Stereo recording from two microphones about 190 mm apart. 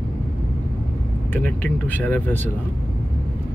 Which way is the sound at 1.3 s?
10° left (ahead or behind).